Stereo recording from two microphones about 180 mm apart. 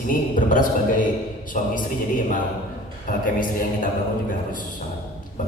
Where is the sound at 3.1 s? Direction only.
50° left (ahead or behind).